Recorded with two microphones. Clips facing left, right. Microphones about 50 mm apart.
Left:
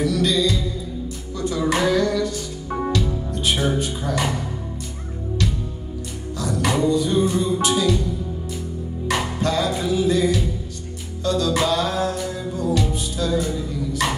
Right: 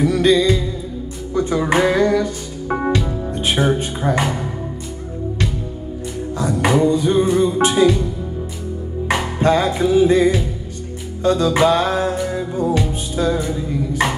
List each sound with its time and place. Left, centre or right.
0.0 s music: right
6.3 s music: right
9.0 s music: right